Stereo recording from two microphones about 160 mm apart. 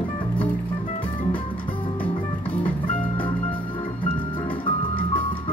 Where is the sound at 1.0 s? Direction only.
35° left (ahead or behind).